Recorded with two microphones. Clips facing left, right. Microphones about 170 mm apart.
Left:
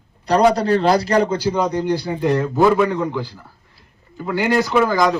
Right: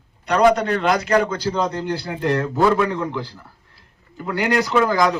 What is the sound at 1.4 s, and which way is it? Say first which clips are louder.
A man's voice: left 3 dB; 10° left (ahead or behind).